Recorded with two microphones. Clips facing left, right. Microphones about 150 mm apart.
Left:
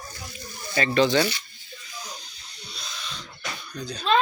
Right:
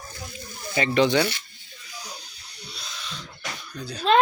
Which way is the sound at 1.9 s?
10° right (ahead or behind).